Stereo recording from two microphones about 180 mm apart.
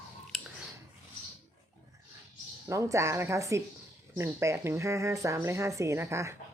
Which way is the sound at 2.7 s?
15° right (ahead or behind).